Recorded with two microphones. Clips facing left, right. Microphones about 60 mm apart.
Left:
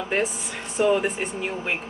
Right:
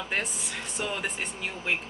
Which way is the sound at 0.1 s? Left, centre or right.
Centre.